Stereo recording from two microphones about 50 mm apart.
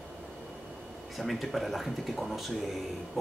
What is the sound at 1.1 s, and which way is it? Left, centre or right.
Speech, centre.